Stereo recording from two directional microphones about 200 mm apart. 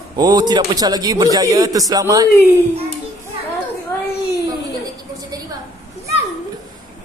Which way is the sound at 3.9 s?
10° left (ahead or behind).